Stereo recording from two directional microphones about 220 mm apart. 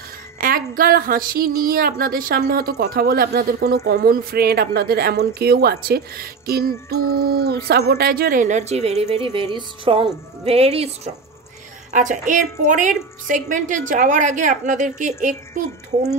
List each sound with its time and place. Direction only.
0.4 s a woman's voice: 40° right (ahead or behind)
11.9 s a woman's voice: 35° right (ahead or behind)